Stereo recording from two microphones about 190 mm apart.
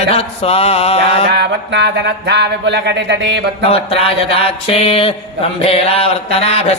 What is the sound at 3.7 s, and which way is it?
Mantra, 30° left (ahead or behind).